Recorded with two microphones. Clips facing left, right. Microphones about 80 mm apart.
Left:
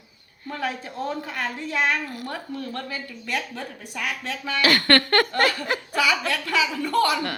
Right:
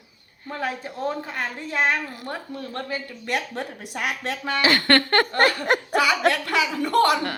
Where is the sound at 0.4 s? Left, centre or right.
Centre.